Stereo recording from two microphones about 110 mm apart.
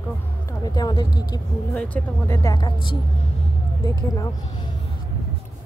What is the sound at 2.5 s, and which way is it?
Speech, 45° left (ahead or behind).